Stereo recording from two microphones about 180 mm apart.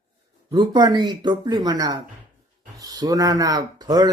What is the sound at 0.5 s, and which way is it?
Speech, 25° right (ahead or behind).